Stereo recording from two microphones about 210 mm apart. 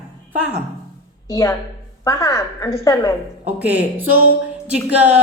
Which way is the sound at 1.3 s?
15° left (ahead or behind).